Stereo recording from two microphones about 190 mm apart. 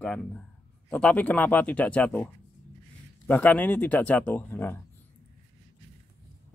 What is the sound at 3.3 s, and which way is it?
Speech, 10° left (ahead or behind).